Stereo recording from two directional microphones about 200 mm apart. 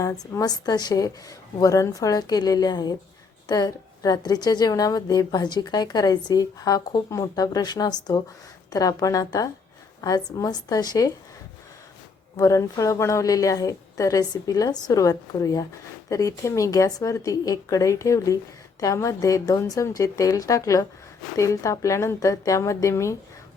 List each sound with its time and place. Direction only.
0.0 s a woman's voice: 15° left (ahead or behind)
12.4 s a woman's voice: 15° left (ahead or behind)